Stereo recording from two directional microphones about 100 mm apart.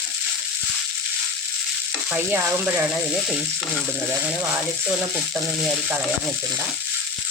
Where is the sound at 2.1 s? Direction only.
20° right (ahead or behind).